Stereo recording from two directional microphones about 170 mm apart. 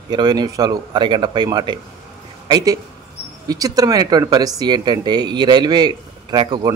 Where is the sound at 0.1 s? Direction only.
25° right (ahead or behind).